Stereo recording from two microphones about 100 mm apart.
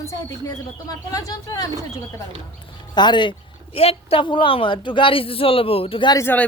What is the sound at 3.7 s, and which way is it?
A woman's voice, 70° left (ahead or behind).